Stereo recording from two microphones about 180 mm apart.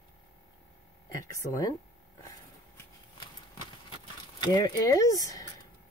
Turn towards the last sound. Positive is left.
turn(degrees=20)  # may be behind; listen again after turning